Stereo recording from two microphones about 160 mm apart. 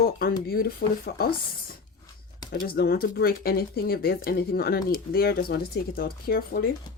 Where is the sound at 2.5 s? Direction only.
70° left (ahead or behind).